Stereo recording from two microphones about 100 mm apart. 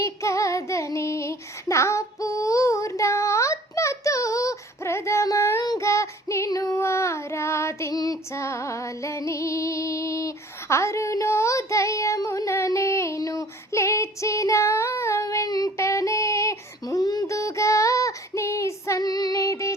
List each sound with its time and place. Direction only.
0.0 s child singing: 30° left (ahead or behind)